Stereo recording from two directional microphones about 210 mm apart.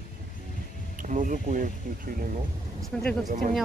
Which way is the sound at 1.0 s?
40° right (ahead or behind).